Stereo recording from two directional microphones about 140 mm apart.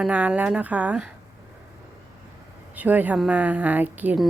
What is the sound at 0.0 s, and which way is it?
Speech, 10° right (ahead or behind).